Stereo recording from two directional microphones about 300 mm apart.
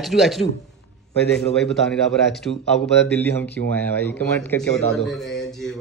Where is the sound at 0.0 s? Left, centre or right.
Centre.